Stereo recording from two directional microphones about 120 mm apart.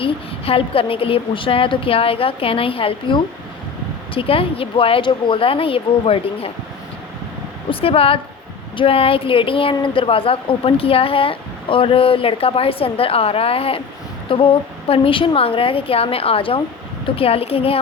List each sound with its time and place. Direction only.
0.0 s a woman's voice: 50° left (ahead or behind)
7.7 s a woman's voice: 50° left (ahead or behind)